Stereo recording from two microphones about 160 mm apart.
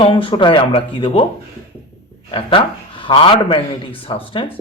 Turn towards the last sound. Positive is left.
turn(degrees=35)  # may be behind; listen again after turning